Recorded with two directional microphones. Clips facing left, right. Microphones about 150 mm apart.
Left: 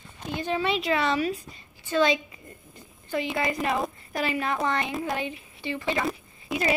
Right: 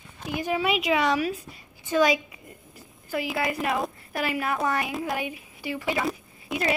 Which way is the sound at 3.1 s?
5° right (ahead or behind).